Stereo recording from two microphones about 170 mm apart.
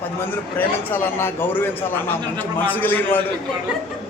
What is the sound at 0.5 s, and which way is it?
A man's voice, 10° left (ahead or behind).